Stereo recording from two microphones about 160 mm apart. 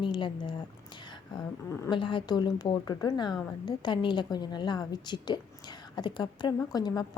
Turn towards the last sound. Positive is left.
turn(degrees=25)  # may be behind; listen again after turning